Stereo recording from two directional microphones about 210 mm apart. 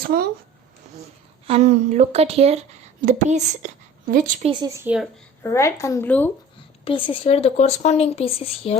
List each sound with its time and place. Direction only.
0.0 s a woman's voice: 45° right (ahead or behind)
1.5 s a woman's voice: 30° right (ahead or behind)
4.4 s speech: 15° right (ahead or behind)
5.4 s speech: 15° left (ahead or behind)
6.8 s speech: 25° left (ahead or behind)